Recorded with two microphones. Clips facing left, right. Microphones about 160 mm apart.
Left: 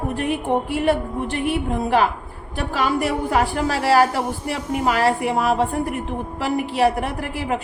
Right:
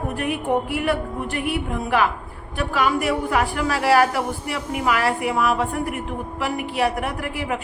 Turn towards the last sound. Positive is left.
turn(degrees=30)  # may be behind; listen again after turning